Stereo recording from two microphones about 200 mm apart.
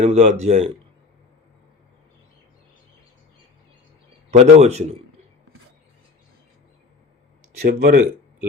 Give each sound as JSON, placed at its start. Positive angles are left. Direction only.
{"t": 0.0, "sound": "a man's voice", "side_deg": -35}
{"t": 4.3, "sound": "a man's voice", "side_deg": -35}
{"t": 7.7, "sound": "speech", "side_deg": -45}